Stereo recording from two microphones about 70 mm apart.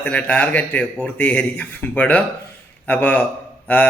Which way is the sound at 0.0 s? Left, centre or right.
Left.